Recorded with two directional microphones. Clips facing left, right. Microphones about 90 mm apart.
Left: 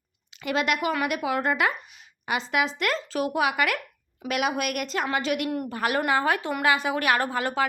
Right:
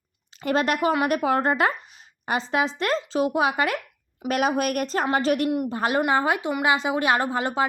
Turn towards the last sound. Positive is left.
turn(degrees=-25)  # may be behind; listen again after turning